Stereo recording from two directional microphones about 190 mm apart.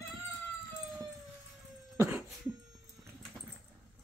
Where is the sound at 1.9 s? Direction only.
10° right (ahead or behind).